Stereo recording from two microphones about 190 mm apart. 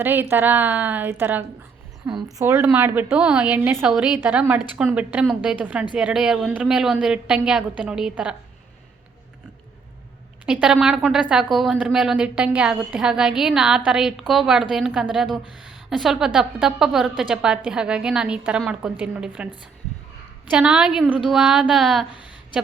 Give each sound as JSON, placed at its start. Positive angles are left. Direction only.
{"t": 0.0, "sound": "a woman's voice", "side_deg": -10}
{"t": 2.0, "sound": "speech", "side_deg": -25}
{"t": 2.4, "sound": "a woman's voice", "side_deg": -10}
{"t": 10.4, "sound": "a woman's voice", "side_deg": -5}
{"t": 20.5, "sound": "a woman's voice", "side_deg": -5}